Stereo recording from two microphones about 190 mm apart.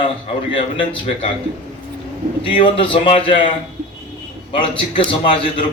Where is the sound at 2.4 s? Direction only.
25° left (ahead or behind).